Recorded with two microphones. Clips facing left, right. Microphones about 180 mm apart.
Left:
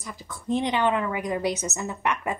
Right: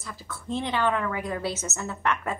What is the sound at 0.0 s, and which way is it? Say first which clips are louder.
A woman's voice: left 2 dB; 15° left (ahead or behind).